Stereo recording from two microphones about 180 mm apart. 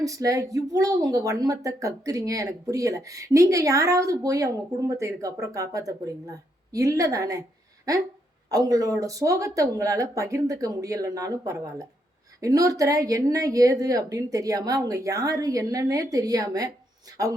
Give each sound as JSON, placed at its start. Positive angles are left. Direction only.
{"t": 0.0, "sound": "a woman's voice", "side_deg": -20}